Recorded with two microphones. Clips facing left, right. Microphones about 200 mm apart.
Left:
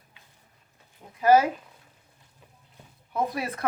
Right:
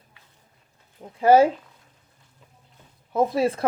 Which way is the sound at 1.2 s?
30° right (ahead or behind).